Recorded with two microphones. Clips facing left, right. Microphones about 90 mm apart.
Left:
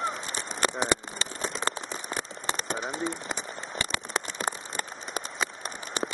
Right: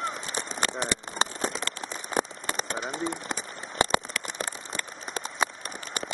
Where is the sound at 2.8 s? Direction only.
Centre (ahead or behind).